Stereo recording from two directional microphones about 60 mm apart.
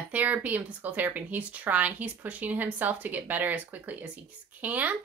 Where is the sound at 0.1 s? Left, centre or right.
Right.